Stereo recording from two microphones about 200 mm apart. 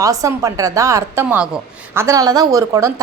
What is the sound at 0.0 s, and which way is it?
A woman's voice, 15° right (ahead or behind).